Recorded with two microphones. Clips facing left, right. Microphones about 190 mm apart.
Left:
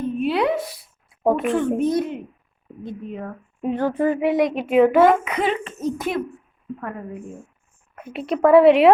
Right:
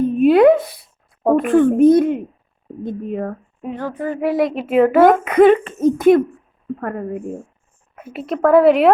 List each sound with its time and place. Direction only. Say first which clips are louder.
0.2 s a sound: right 11 dB; 50° right (ahead or behind)
1.1 s a sound: right 4 dB; centre (ahead or behind)
1.5 s a child's voice: right 9 dB; 55° right (ahead or behind)
3.8 s speech: left 4 dB; 30° left (ahead or behind)
4.2 s speech: right 1 dB; centre (ahead or behind)
5.0 s a child's voice: right 7 dB; 50° right (ahead or behind)
7.9 s speech: right 1 dB; 5° right (ahead or behind)